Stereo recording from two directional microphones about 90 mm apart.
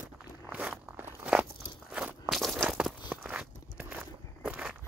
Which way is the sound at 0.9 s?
25° right (ahead or behind).